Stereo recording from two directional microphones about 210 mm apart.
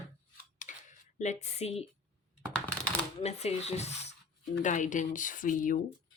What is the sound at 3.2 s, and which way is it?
Speech, 30° left (ahead or behind).